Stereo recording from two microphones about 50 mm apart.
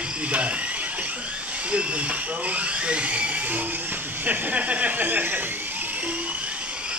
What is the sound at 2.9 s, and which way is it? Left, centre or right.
Speech, right.